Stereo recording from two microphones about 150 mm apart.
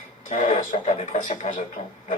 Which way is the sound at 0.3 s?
55° left (ahead or behind).